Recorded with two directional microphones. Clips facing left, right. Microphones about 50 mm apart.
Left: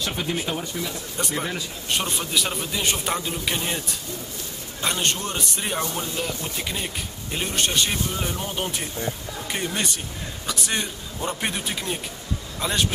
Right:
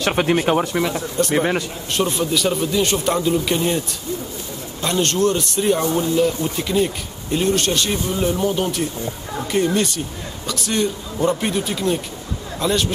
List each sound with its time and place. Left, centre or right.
0.0 s speech: right
1.9 s a man's voice: centre
4.8 s speech: centre